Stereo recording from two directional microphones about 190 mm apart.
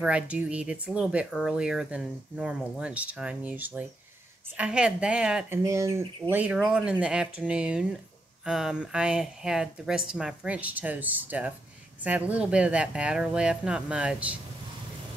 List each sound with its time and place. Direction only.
0.0 s speech: 5° right (ahead or behind)
5.6 s speech: 15° right (ahead or behind)